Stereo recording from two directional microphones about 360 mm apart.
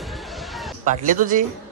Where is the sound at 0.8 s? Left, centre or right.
Right.